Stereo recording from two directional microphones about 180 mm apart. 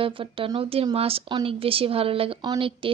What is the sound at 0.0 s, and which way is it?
Speech, 30° right (ahead or behind).